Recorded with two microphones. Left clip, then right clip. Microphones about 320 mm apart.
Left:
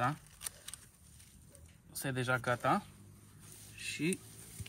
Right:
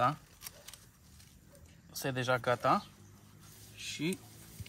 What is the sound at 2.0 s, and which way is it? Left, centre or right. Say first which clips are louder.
Speech: right 3 dB; centre.